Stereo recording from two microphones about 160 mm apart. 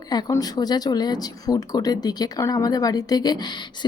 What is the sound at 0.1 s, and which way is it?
A woman's voice, 25° left (ahead or behind).